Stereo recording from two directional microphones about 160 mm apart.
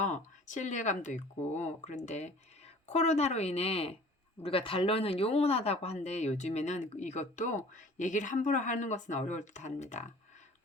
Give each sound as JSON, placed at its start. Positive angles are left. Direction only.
{"t": 0.0, "sound": "a woman's voice", "side_deg": 50}